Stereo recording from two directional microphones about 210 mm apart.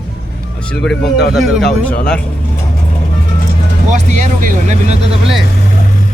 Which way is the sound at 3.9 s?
35° right (ahead or behind).